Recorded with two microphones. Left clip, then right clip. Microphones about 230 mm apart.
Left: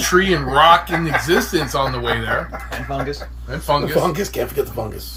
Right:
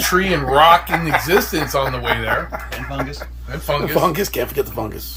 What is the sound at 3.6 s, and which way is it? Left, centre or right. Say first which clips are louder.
Speech: even; centre.